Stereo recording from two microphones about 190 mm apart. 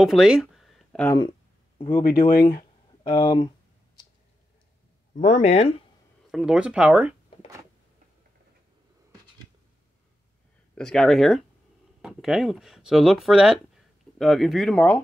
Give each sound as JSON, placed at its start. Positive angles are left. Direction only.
{"t": 0.0, "sound": "a sound", "side_deg": 0}
{"t": 1.8, "sound": "speech", "side_deg": 25}
{"t": 2.0, "sound": "speech", "side_deg": 55}
{"t": 3.0, "sound": "speech", "side_deg": 25}
{"t": 5.1, "sound": "speech", "side_deg": 40}
{"t": 6.3, "sound": "speech", "side_deg": -5}
{"t": 10.7, "sound": "speech", "side_deg": 5}